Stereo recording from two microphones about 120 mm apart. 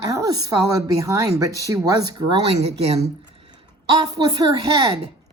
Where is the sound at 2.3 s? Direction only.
60° right (ahead or behind).